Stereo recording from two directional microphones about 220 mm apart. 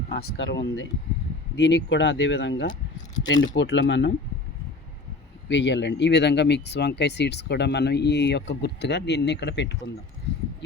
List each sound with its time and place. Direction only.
0.1 s speech: 50° left (ahead or behind)
5.5 s speech: 55° left (ahead or behind)
10.3 s a sound: 50° left (ahead or behind)